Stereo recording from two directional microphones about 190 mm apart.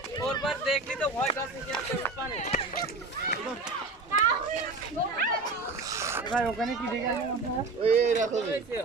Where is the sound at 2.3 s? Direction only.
35° left (ahead or behind).